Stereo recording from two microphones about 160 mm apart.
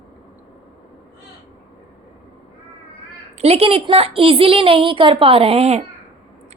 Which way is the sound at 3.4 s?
40° right (ahead or behind).